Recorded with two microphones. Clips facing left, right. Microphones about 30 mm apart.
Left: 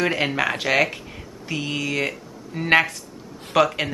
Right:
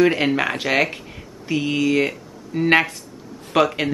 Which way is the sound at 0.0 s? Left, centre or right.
Centre.